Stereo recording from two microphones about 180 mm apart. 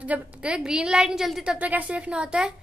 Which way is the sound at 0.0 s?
5° right (ahead or behind).